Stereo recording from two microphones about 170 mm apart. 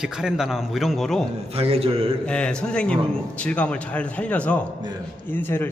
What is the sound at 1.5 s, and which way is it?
Speech, 35° right (ahead or behind).